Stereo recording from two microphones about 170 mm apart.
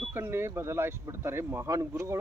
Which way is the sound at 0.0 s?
15° right (ahead or behind).